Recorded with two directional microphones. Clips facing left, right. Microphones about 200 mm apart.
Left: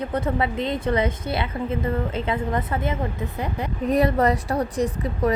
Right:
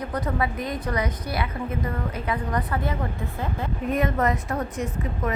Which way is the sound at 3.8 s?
35° left (ahead or behind).